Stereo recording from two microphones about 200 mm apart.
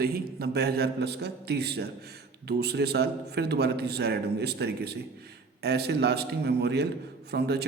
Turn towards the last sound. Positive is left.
turn(degrees=-55)  # may be behind; listen again after turning